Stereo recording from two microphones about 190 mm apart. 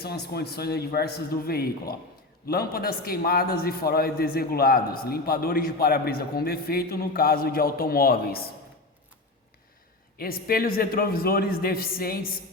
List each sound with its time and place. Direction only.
0.0 s a man's voice: 55° left (ahead or behind)
10.2 s a man's voice: 50° left (ahead or behind)